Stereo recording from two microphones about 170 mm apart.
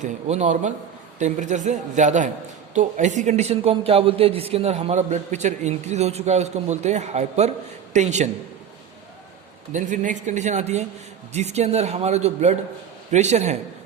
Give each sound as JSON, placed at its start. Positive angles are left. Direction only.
{"t": 0.0, "sound": "a man's voice", "side_deg": -45}
{"t": 9.7, "sound": "a man's voice", "side_deg": -50}